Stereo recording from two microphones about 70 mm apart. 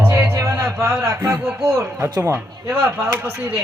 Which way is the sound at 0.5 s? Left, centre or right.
Right.